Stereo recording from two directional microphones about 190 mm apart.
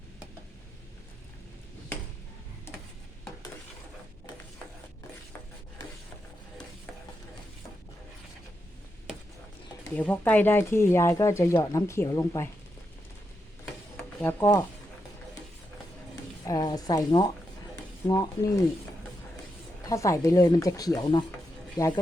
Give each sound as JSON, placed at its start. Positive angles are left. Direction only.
{"t": 9.9, "sound": "speech", "side_deg": 10}
{"t": 13.9, "sound": "a sound", "side_deg": 10}
{"t": 16.5, "sound": "speech", "side_deg": 20}
{"t": 19.9, "sound": "speech", "side_deg": 15}